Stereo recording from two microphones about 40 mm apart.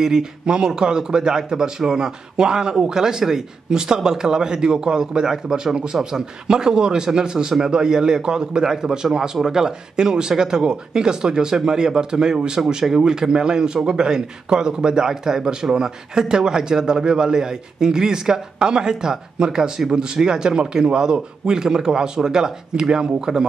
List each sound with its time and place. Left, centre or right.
0.0 s a man's voice: centre